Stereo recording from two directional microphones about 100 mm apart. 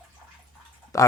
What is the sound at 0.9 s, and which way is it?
Speech, 30° left (ahead or behind).